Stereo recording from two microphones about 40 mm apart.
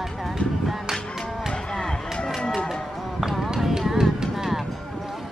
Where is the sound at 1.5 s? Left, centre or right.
Centre.